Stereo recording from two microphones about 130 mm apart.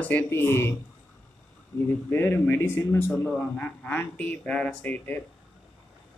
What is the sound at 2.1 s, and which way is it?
Speech, 15° left (ahead or behind).